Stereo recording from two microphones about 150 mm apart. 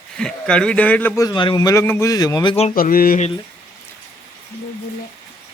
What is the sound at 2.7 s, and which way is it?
Speech, 75° left (ahead or behind).